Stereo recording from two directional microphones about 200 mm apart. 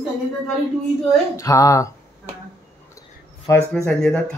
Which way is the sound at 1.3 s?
15° left (ahead or behind).